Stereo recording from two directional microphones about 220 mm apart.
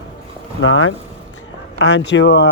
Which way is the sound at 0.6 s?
65° left (ahead or behind).